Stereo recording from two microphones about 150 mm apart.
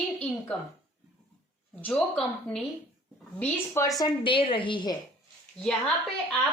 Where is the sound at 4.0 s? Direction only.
35° left (ahead or behind).